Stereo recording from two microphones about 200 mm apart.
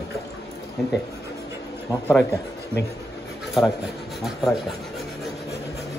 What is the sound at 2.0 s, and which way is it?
Speech, 10° left (ahead or behind).